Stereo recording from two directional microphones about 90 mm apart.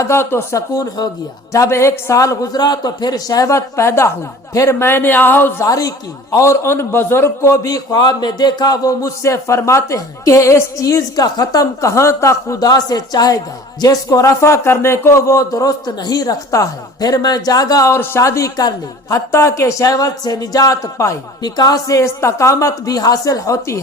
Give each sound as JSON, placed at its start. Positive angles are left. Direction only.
{"t": 0.0, "sound": "a man's voice", "side_deg": 30}
{"t": 5.6, "sound": "a man's voice", "side_deg": 40}
{"t": 7.6, "sound": "a man's voice", "side_deg": 45}